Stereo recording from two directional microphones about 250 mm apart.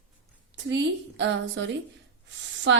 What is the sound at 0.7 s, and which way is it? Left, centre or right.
A woman's voice, right.